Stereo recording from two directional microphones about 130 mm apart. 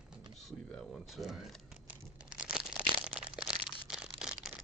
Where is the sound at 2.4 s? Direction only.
5° right (ahead or behind).